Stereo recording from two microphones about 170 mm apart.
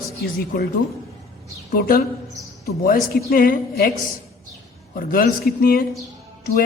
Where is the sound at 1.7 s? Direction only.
60° left (ahead or behind).